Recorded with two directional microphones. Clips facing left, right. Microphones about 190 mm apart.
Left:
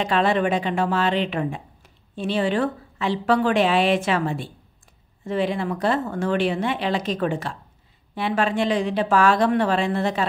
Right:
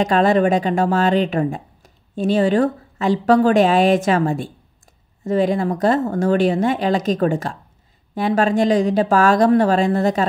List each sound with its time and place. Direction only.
0.0 s speech: 45° right (ahead or behind)